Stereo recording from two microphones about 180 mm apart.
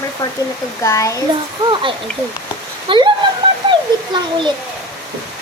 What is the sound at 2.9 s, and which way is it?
Speech, 25° right (ahead or behind).